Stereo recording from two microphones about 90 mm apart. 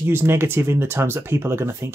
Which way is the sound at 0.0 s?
25° right (ahead or behind).